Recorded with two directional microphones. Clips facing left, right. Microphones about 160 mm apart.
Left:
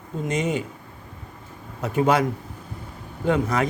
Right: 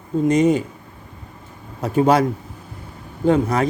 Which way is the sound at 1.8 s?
35° right (ahead or behind).